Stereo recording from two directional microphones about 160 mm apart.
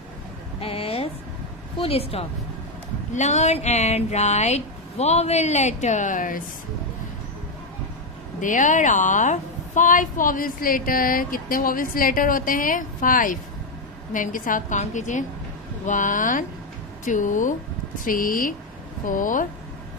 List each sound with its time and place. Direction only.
0.6 s a woman's voice: 35° left (ahead or behind); by 6.4 s 55° left (ahead or behind)
8.4 s a woman's voice: 55° left (ahead or behind)